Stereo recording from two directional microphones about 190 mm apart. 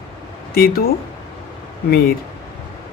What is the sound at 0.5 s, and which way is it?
Speech, 50° left (ahead or behind).